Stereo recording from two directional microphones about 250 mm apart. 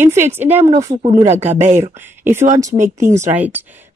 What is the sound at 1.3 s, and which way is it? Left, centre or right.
Speech, right.